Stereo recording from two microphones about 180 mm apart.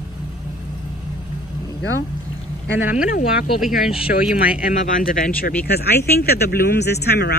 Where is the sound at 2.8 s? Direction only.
5° right (ahead or behind).